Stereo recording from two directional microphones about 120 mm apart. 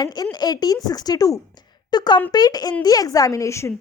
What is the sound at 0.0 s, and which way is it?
A woman's voice, 35° left (ahead or behind).